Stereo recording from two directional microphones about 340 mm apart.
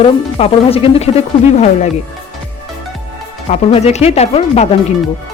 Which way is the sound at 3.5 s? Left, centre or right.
Centre.